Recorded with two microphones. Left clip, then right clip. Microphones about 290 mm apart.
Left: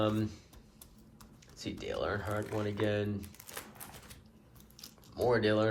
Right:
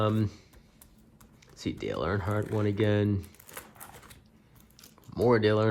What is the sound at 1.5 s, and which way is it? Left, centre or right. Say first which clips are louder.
Speech: right 4 dB; right.